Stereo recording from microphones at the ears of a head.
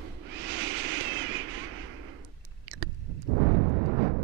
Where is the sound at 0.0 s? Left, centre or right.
Right.